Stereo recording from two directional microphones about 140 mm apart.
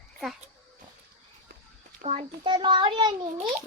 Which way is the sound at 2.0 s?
50° right (ahead or behind).